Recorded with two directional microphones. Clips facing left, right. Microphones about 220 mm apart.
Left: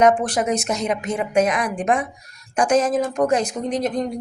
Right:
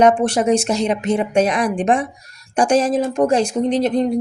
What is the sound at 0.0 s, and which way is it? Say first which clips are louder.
Speech: right 3 dB; 25° right (ahead or behind).